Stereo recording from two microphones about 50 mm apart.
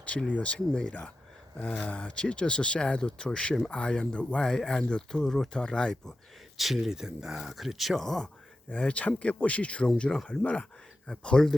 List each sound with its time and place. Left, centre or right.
0.0 s speech: left
6.6 s speech: centre
8.7 s speech: left